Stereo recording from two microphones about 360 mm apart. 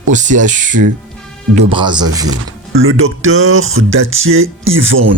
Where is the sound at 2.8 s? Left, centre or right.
Right.